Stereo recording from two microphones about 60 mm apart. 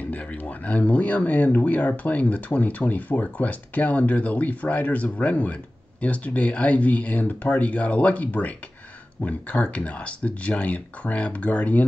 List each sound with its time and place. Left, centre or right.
0.1 s speech: left